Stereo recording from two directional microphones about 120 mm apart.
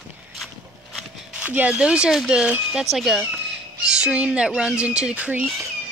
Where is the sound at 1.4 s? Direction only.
10° right (ahead or behind).